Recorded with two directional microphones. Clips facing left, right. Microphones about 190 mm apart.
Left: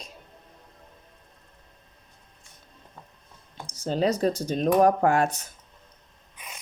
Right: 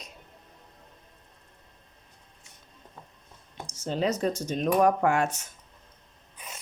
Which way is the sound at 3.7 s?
35° left (ahead or behind).